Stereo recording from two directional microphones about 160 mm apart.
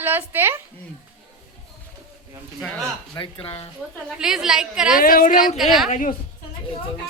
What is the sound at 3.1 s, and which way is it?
Speech, 35° left (ahead or behind).